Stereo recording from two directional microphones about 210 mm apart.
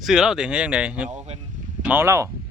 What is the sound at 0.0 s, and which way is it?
Speech, centre (ahead or behind).